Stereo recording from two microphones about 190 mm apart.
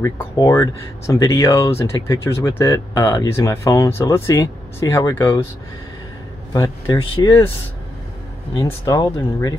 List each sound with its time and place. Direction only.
0.0 s speech: 15° left (ahead or behind)
6.5 s speech: 20° left (ahead or behind)
8.8 s speech: 20° left (ahead or behind)